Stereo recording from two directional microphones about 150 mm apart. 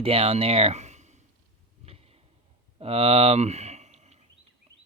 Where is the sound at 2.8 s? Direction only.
40° right (ahead or behind).